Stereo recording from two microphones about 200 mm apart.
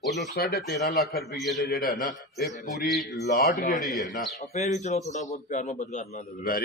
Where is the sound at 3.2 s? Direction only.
50° left (ahead or behind).